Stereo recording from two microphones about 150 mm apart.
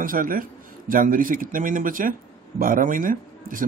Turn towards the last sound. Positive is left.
turn(degrees=-65)  # may be behind; listen again after turning